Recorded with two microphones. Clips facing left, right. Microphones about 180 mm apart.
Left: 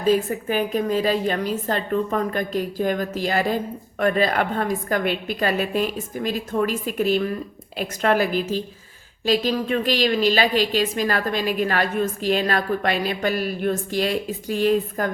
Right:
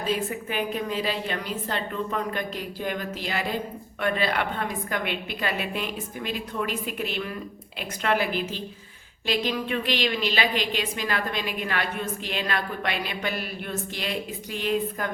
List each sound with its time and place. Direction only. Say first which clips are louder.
0.0 s a woman's voice: left 8 dB; 45° left (ahead or behind)